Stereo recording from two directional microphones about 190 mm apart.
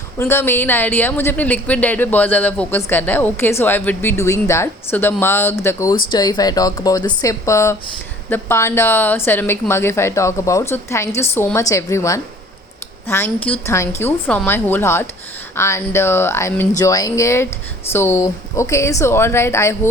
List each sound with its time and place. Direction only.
0.2 s a woman's voice: 15° left (ahead or behind)